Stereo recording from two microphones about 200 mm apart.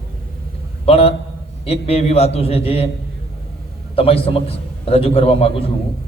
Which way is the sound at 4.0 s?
30° left (ahead or behind).